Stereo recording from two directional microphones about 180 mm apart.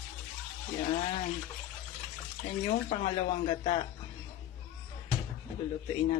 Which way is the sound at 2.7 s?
35° left (ahead or behind).